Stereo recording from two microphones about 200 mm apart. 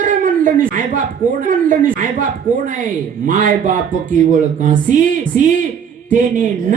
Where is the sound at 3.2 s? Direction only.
40° right (ahead or behind).